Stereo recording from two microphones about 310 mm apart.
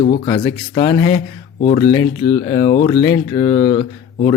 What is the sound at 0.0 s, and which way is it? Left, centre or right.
Speech, centre.